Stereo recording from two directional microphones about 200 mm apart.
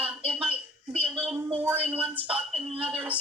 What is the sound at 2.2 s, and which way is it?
Speech, 30° right (ahead or behind).